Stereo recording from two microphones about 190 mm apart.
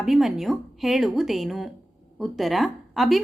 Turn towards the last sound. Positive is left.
turn(degrees=0)  # may be behind; listen again after turning